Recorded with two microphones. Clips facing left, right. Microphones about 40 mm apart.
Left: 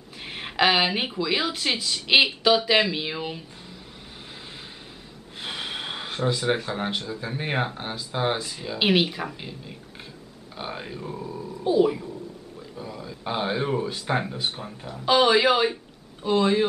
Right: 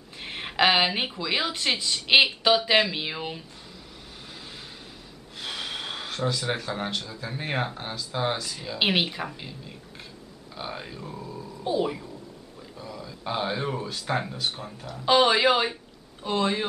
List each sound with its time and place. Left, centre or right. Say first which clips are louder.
0.2 s a woman's voice: even; centre
5.4 s speech: left 1 dB; centre
8.7 s a woman's voice: left 3 dB; centre
9.4 s speech: left 2 dB; centre
11.6 s a woman's voice: left 6 dB; centre
12.7 s speech: left 2 dB; centre
15.0 s speech: left 1 dB; centre